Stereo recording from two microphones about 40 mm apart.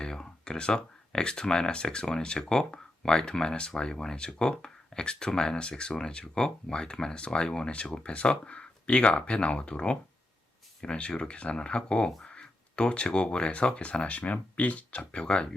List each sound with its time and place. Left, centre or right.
0.0 s speech: centre